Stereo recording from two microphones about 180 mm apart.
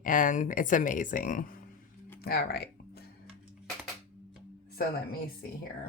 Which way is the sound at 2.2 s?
60° left (ahead or behind).